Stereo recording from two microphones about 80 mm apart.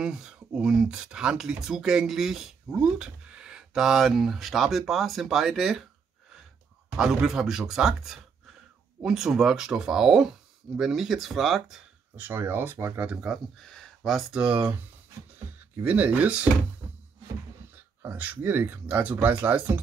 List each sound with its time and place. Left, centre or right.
0.0 s speech: centre
7.0 s speech: centre
12.2 s speech: right
13.6 s a sound: centre
14.3 s speech: centre
18.1 s speech: centre